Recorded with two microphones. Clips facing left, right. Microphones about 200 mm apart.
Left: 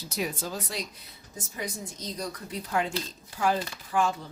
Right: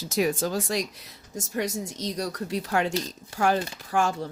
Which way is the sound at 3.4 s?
55° right (ahead or behind).